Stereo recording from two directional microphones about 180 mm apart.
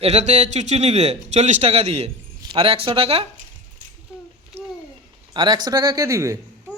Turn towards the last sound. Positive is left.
turn(degrees=-15)  # may be behind; listen again after turning